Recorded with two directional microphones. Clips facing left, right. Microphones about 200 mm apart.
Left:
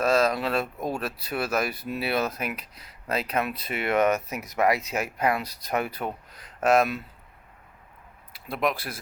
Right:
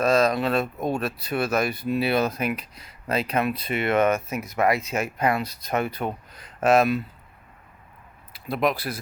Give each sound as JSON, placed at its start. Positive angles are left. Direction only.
{"t": 0.0, "sound": "speech", "side_deg": 5}
{"t": 8.3, "sound": "speech", "side_deg": 0}